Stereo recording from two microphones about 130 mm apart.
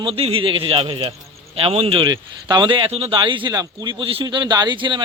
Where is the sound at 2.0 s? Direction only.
30° right (ahead or behind).